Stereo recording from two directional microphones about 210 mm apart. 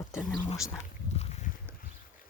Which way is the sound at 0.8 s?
30° left (ahead or behind).